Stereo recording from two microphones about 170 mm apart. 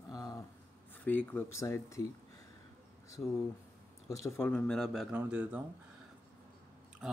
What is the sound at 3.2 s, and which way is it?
Speech, 10° left (ahead or behind).